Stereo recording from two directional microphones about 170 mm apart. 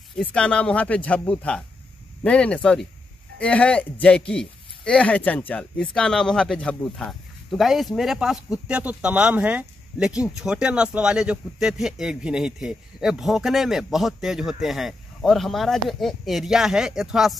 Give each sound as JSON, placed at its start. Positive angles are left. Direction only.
{"t": 0.1, "sound": "speech", "side_deg": 5}